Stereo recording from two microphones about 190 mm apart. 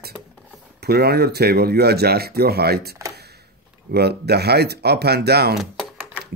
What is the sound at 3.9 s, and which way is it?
Speech, 60° right (ahead or behind).